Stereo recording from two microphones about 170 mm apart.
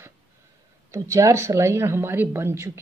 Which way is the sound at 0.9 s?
15° right (ahead or behind).